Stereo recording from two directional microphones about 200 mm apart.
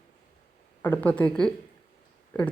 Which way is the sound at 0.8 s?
10° left (ahead or behind).